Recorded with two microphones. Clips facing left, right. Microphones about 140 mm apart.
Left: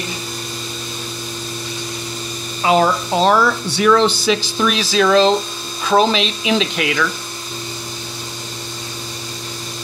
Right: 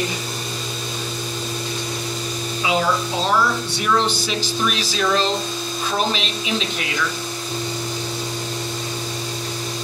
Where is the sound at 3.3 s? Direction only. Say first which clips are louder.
Left 4 dB; 85° left.